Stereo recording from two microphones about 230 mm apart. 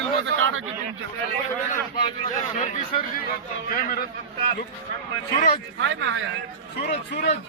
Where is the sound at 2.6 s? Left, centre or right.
Left.